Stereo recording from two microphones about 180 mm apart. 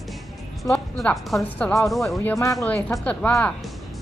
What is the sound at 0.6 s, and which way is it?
Speech, 5° left (ahead or behind).